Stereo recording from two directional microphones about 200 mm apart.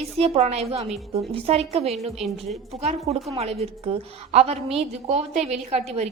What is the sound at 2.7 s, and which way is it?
A woman's voice, 30° right (ahead or behind).